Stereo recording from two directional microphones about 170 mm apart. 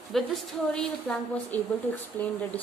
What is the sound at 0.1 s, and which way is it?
A woman's voice, centre (ahead or behind).